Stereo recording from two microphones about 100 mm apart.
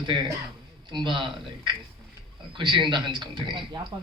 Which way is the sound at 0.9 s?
50° right (ahead or behind).